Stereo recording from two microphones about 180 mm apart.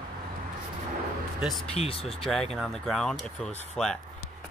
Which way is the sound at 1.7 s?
35° left (ahead or behind).